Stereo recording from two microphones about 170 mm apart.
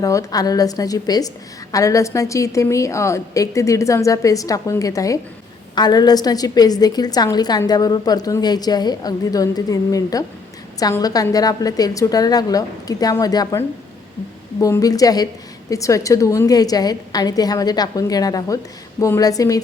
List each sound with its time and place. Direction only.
0.0 s a woman's voice: 20° left (ahead or behind)